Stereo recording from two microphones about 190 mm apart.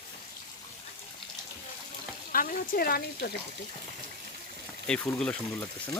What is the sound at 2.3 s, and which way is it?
Speech, 45° left (ahead or behind).